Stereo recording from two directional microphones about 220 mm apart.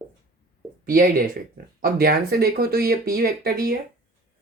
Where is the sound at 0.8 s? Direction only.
40° right (ahead or behind).